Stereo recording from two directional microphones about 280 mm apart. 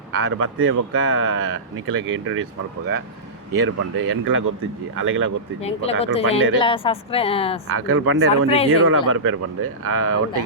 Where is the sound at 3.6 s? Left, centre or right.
Right.